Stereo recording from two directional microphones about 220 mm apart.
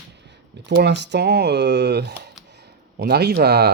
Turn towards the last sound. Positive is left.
turn(degrees=-50)  # may be behind; listen again after turning